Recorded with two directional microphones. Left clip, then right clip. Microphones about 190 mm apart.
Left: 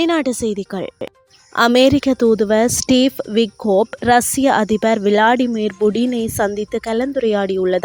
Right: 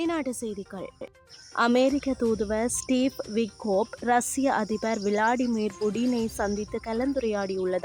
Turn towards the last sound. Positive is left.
turn(degrees=35)  # may be behind; listen again after turning